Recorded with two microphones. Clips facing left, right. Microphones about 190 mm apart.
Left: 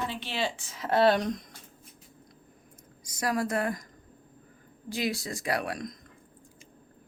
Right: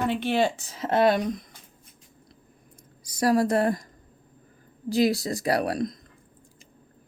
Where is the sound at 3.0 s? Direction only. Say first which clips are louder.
Right 8 dB; 35° right (ahead or behind).